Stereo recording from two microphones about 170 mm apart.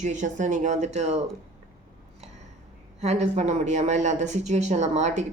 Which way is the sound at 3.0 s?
40° right (ahead or behind).